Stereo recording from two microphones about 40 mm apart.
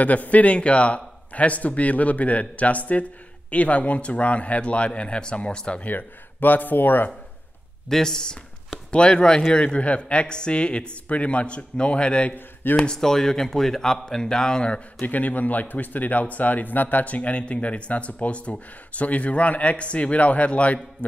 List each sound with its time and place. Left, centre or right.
0.0 s speech: left; by 5.8 s centre
5.9 s speech: left
7.9 s speech: centre
8.9 s speech: left
15.0 s speech: left